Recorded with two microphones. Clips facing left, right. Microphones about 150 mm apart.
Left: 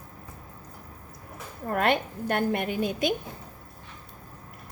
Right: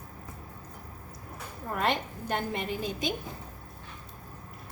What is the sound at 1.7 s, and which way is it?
A woman's voice, 60° left (ahead or behind).